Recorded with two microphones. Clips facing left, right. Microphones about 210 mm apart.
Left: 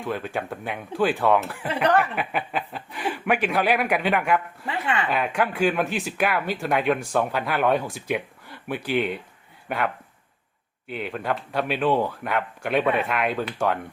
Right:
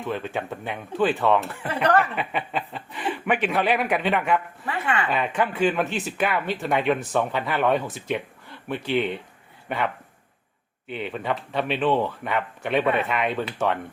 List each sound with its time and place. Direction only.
0.0 s speech: centre (ahead or behind)
1.6 s speech: 15° left (ahead or behind)
4.6 s speech: 20° left (ahead or behind)
5.0 s speech: centre (ahead or behind)